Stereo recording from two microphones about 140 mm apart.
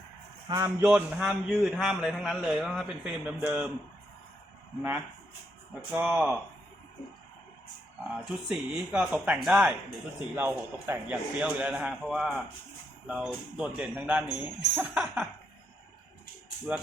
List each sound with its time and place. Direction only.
0.4 s a man's voice: 25° right (ahead or behind)
0.8 s a man's voice: 10° right (ahead or behind)
4.8 s a man's voice: 10° right (ahead or behind)
8.2 s a man's voice: 10° right (ahead or behind)